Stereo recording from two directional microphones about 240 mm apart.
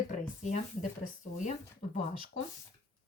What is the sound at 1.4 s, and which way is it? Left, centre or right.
Speech, left.